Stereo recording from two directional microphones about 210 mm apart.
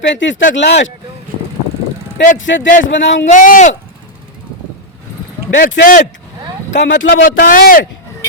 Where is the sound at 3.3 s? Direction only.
35° left (ahead or behind).